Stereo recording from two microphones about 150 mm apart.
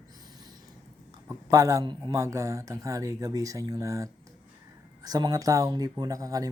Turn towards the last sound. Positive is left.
turn(degrees=-25)  # may be behind; listen again after turning